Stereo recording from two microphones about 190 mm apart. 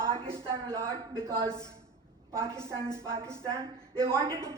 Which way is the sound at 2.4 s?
15° right (ahead or behind).